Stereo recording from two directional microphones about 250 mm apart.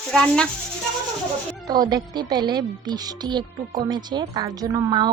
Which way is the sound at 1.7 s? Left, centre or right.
Centre.